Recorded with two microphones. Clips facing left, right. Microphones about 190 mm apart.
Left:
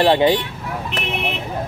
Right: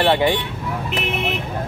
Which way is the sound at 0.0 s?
20° left (ahead or behind).